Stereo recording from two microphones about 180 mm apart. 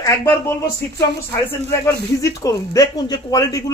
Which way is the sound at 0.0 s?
15° left (ahead or behind).